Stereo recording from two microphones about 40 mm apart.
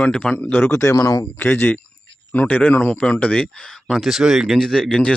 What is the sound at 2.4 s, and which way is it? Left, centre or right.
Speech, left.